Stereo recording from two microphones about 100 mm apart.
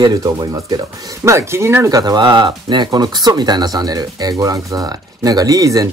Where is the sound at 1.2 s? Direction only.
25° right (ahead or behind).